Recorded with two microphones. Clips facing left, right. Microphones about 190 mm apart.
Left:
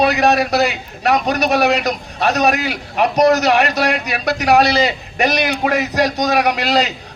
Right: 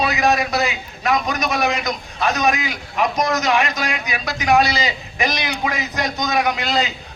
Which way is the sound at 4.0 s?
70° left (ahead or behind).